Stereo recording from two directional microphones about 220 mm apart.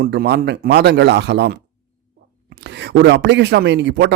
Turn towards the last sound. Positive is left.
turn(degrees=-50)  # may be behind; listen again after turning